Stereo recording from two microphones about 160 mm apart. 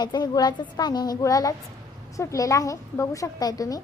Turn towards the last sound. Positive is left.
turn(degrees=20)  # may be behind; listen again after turning